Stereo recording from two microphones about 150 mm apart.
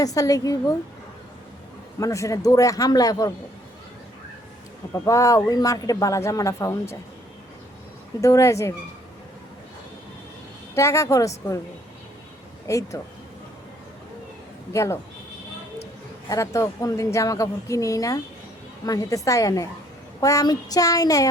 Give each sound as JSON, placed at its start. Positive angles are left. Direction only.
{"t": 0.0, "sound": "speech", "side_deg": 25}
{"t": 2.0, "sound": "speech", "side_deg": 20}
{"t": 5.0, "sound": "speech", "side_deg": 20}
{"t": 8.2, "sound": "speech", "side_deg": 20}
{"t": 10.8, "sound": "speech", "side_deg": 20}
{"t": 12.6, "sound": "speech", "side_deg": 20}
{"t": 14.7, "sound": "speech", "side_deg": 20}
{"t": 16.3, "sound": "speech", "side_deg": 20}